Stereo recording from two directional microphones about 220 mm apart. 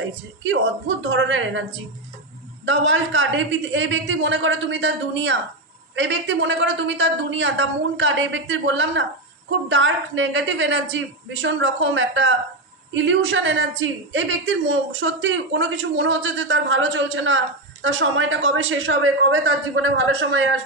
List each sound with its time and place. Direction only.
0.4 s a woman's voice: 55° right (ahead or behind)